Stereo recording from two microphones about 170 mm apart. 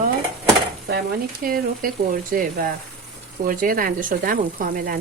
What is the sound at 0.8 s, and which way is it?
Speech, 65° right (ahead or behind).